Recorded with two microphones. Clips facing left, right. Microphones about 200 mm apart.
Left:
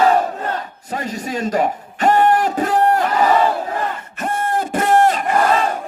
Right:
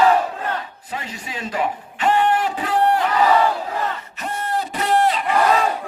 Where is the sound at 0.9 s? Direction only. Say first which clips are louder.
Left 11 dB; 45° left (ahead or behind).